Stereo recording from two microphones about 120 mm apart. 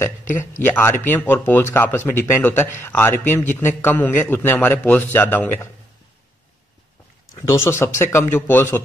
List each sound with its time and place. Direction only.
0.4 s speech: 15° left (ahead or behind)
7.3 s speech: 25° left (ahead or behind)